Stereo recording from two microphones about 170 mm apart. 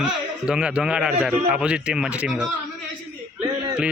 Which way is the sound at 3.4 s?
30° right (ahead or behind).